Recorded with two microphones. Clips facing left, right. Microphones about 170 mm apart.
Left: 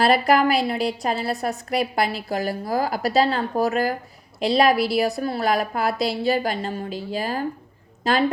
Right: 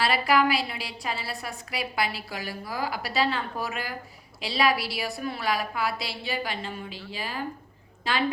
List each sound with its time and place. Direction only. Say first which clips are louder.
0.0 s a woman's voice: left 6 dB; 40° left (ahead or behind)